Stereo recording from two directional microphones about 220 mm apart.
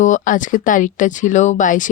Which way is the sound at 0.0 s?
35° left (ahead or behind).